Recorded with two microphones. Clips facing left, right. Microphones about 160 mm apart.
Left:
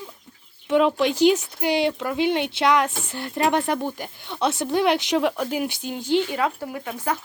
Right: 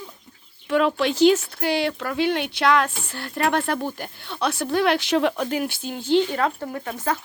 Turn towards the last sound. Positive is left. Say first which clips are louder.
# right 1 dB
turn(degrees=10)  # may be behind; listen again after turning